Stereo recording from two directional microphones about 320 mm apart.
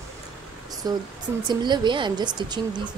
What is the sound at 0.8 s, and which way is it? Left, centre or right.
A woman's voice, centre.